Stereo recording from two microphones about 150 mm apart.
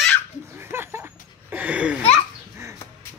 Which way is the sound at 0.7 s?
15° right (ahead or behind).